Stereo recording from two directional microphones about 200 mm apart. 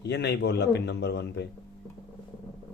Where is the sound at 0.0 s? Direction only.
55° left (ahead or behind).